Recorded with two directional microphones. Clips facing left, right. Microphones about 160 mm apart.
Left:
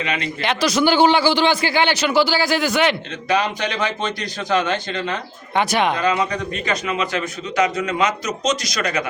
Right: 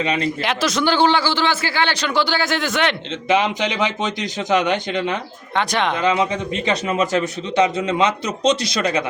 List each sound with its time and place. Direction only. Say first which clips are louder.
0.0 s a man's voice: right 4 dB; 35° right (ahead or behind)
0.4 s a man's voice: left 5 dB; centre (ahead or behind)
3.2 s a man's voice: right 2 dB; 20° right (ahead or behind)
5.5 s a man's voice: left 2 dB; 10° left (ahead or behind)
5.9 s a man's voice: right 1 dB; 20° right (ahead or behind)
6.8 s a man's voice: right 4 dB; 40° right (ahead or behind)